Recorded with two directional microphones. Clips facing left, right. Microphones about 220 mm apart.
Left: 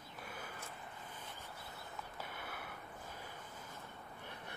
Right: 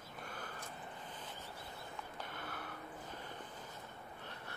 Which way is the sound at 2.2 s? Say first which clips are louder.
Right 1 dB; 10° left (ahead or behind).